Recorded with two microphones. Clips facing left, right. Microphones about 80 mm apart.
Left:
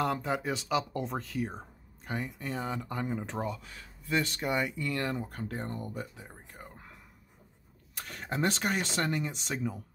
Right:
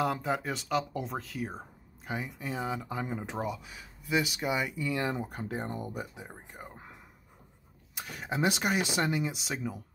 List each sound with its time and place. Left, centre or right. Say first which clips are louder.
0.0 s speech: even; centre
4.8 s speech: right 1 dB; centre
7.9 s speech: right 1 dB; centre